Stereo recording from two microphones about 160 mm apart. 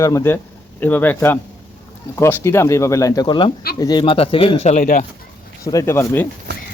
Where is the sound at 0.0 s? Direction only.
20° left (ahead or behind); by 5.0 s 55° left (ahead or behind).